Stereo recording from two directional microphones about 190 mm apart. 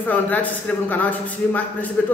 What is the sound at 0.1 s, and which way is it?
A man's voice, 10° left (ahead or behind).